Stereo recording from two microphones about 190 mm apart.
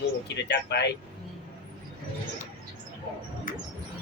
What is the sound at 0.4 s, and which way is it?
Speech, 65° left (ahead or behind).